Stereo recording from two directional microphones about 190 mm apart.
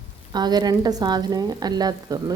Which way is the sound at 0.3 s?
20° right (ahead or behind).